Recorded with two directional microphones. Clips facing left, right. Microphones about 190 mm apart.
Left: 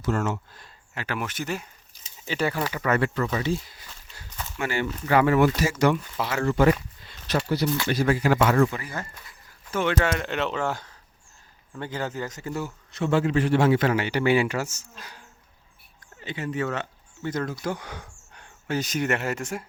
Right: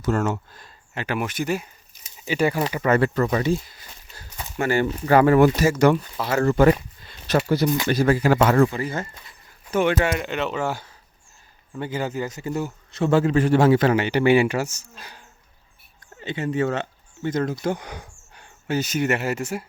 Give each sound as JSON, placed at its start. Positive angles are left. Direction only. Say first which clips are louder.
{"t": 0.0, "sound": "speech", "louder": "right 3 dB", "side_deg": -45}
{"t": 0.9, "sound": "speech", "louder": "right 5 dB", "side_deg": -15}
{"t": 3.3, "sound": "speech", "louder": "right 5 dB", "side_deg": -50}
{"t": 10.2, "sound": "speech", "louder": "right 2 dB", "side_deg": 0}
{"t": 12.9, "sound": "speech", "louder": "right 4 dB", "side_deg": -35}
{"t": 13.9, "sound": "speech", "louder": "right 4 dB", "side_deg": -20}
{"t": 16.2, "sound": "speech", "louder": "right 5 dB", "side_deg": -25}